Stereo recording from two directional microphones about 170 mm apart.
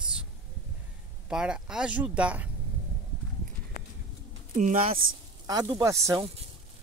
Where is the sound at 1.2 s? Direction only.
5° right (ahead or behind).